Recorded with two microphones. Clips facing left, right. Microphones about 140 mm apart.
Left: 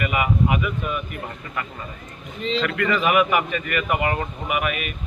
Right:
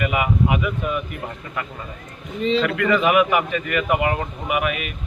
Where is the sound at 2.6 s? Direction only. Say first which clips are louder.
Right 3 dB; 15° right (ahead or behind).